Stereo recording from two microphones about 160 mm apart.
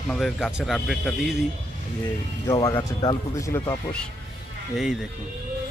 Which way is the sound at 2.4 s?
25° left (ahead or behind).